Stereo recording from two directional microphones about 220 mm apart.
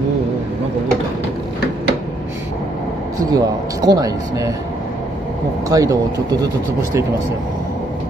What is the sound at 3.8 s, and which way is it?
Speech, 15° right (ahead or behind).